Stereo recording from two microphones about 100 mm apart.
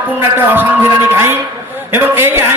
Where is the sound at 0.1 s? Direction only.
20° right (ahead or behind).